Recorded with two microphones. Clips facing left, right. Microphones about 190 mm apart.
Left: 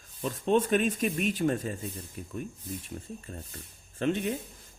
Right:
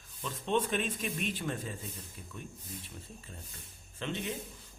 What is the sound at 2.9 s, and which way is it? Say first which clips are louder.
Speech: left 8 dB; 50° left (ahead or behind).